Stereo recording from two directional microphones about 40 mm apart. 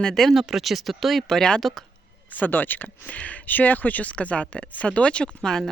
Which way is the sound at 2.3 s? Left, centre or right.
Left.